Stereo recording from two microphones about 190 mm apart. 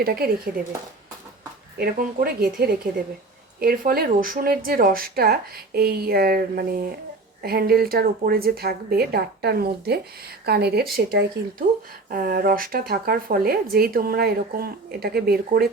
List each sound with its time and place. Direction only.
0.0 s speech: 55° right (ahead or behind)
1.8 s a woman's voice: 50° right (ahead or behind)
11.6 s speech: 45° right (ahead or behind)